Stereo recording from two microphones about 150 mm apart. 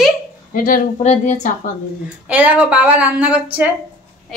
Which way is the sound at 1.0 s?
50° left (ahead or behind).